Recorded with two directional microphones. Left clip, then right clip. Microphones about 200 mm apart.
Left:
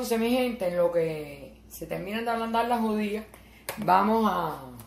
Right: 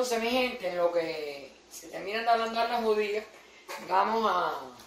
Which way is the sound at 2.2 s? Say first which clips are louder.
Right 1 dB; 50° left (ahead or behind).